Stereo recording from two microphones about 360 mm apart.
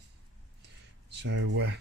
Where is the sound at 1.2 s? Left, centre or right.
Right.